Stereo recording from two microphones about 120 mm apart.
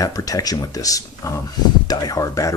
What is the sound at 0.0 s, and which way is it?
Speech, 30° left (ahead or behind).